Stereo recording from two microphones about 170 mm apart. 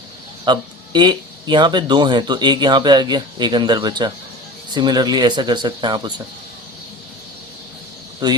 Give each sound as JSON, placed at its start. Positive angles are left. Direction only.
{"t": 0.4, "sound": "speech", "side_deg": -25}